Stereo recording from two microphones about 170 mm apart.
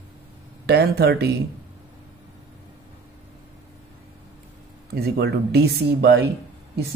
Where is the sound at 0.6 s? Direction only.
70° right (ahead or behind).